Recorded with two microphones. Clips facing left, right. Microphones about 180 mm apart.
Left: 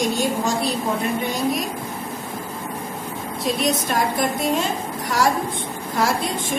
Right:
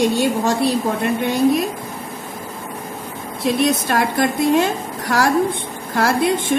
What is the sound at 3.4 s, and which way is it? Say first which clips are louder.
A woman's voice: right 5 dB; 65° right (ahead or behind).